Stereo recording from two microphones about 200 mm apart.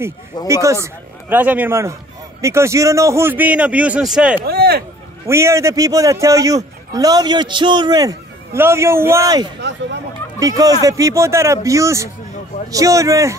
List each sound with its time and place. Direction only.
0.5 s a man's voice: 15° right (ahead or behind)
4.5 s speech: 50° right (ahead or behind)
5.2 s a man's voice: 15° right (ahead or behind)